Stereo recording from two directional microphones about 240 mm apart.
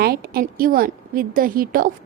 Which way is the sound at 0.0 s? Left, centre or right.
Right.